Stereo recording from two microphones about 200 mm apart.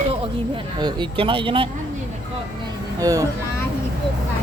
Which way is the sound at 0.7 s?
20° right (ahead or behind).